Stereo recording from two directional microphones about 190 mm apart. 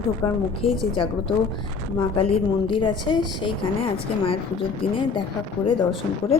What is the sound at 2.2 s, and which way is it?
A woman's voice, 25° left (ahead or behind).